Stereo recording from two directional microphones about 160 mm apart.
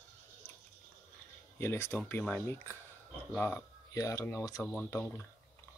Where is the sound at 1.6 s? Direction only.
15° left (ahead or behind).